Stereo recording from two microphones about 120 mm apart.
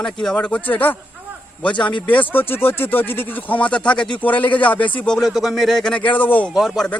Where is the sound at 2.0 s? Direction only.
15° left (ahead or behind).